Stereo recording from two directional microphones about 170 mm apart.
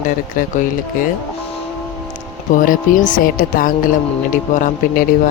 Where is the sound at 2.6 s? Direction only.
50° left (ahead or behind).